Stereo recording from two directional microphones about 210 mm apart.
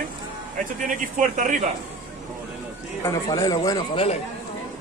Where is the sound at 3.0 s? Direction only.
20° left (ahead or behind).